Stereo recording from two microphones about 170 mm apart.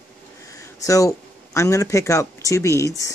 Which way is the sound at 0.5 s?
20° left (ahead or behind).